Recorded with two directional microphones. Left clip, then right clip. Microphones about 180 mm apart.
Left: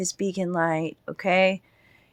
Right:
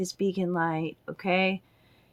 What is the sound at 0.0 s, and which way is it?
Speech, 45° left (ahead or behind).